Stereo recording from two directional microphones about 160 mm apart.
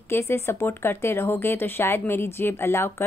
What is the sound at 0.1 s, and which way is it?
A woman's voice, 15° left (ahead or behind).